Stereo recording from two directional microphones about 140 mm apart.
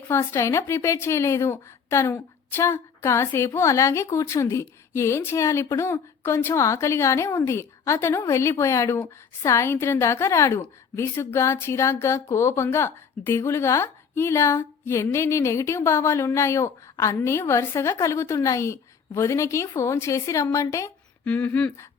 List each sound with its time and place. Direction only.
0.1 s a woman's voice: 20° left (ahead or behind)
21.2 s speech: 10° left (ahead or behind)